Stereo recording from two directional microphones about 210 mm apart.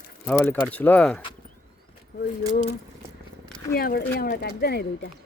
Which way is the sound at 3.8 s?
45° left (ahead or behind).